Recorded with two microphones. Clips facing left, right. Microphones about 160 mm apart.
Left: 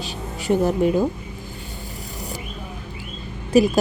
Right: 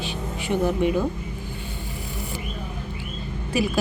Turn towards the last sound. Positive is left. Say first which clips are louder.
# left 8 dB
turn(degrees=40)  # may be behind; listen again after turning